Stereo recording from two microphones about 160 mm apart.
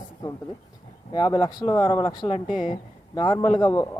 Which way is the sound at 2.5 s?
55° left (ahead or behind).